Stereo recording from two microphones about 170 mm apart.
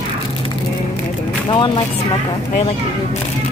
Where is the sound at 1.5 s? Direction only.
30° left (ahead or behind).